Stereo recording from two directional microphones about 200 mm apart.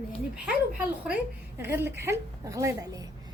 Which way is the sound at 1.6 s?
10° right (ahead or behind).